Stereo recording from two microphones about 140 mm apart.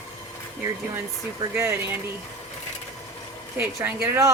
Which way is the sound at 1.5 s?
20° right (ahead or behind).